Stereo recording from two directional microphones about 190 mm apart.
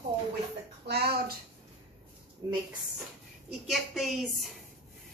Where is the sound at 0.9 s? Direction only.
55° right (ahead or behind).